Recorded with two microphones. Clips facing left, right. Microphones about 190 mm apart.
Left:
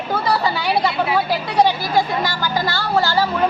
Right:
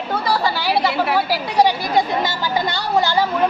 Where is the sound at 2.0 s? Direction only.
20° right (ahead or behind).